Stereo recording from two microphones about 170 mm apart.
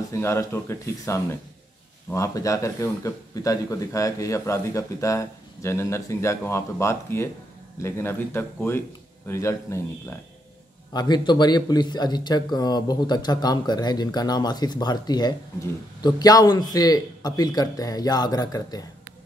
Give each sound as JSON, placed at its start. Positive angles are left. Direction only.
{"t": 0.1, "sound": "speech", "side_deg": 15}